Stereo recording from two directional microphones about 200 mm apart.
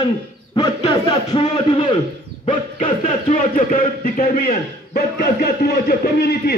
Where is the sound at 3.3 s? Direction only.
45° left (ahead or behind).